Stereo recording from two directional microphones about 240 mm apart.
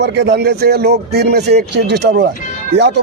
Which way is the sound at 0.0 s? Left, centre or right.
Right.